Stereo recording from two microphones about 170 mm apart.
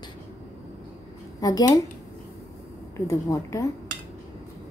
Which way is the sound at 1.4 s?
20° left (ahead or behind).